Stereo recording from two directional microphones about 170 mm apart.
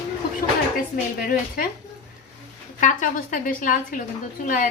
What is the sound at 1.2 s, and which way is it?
Speech, 55° left (ahead or behind).